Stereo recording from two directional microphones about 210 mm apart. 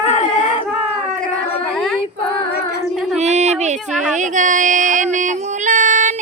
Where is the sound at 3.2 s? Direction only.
30° right (ahead or behind).